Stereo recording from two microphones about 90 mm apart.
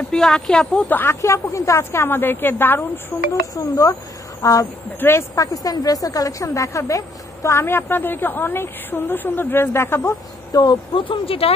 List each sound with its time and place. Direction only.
0.1 s speech: 5° left (ahead or behind)
0.8 s speech: 20° left (ahead or behind)
1.2 s speech: 35° left (ahead or behind)
3.5 s speech: 40° left (ahead or behind)
5.0 s speech: 30° left (ahead or behind)
5.4 s speech: 40° left (ahead or behind)
10.5 s speech: 50° left (ahead or behind)
11.0 s speech: 80° left